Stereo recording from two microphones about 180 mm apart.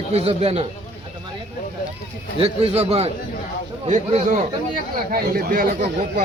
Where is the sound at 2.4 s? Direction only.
35° right (ahead or behind).